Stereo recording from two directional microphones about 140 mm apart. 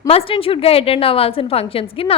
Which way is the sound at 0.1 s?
40° left (ahead or behind).